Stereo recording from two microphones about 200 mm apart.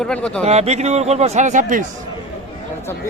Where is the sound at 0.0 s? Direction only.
5° left (ahead or behind).